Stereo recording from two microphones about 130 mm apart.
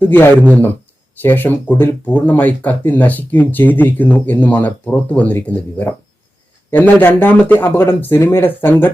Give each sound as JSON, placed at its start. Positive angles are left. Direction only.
{"t": 0.5, "sound": "speech", "side_deg": 15}